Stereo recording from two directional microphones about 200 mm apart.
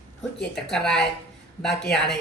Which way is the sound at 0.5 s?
5° left (ahead or behind).